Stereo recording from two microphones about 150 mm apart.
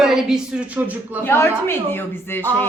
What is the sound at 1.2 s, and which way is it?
A woman's voice, 15° left (ahead or behind).